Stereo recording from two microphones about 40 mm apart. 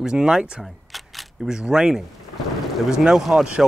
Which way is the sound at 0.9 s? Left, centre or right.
Centre.